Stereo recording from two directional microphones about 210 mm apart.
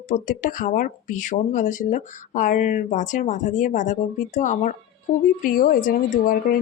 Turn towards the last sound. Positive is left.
turn(degrees=40)  # may be behind; listen again after turning